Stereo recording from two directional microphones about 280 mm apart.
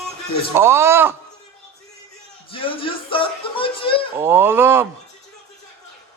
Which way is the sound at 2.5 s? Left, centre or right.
Centre.